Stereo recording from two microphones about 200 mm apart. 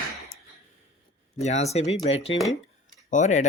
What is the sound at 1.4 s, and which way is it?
Speech, 35° left (ahead or behind).